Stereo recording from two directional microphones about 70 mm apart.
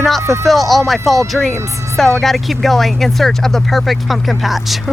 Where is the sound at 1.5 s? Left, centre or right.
Right.